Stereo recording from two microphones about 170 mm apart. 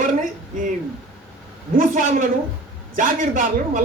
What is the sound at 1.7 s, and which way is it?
Speech, 55° right (ahead or behind).